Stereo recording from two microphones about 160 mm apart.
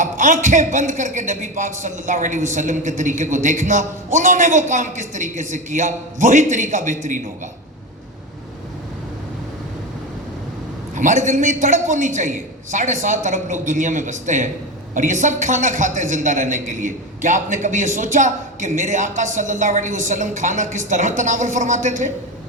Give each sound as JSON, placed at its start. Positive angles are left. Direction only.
{"t": 0.0, "sound": "a man's voice", "side_deg": -50}
{"t": 10.9, "sound": "a man's voice", "side_deg": -50}